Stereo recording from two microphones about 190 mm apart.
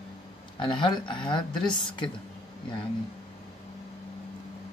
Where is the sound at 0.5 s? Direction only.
25° left (ahead or behind).